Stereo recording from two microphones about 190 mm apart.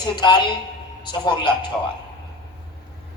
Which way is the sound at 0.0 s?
25° left (ahead or behind).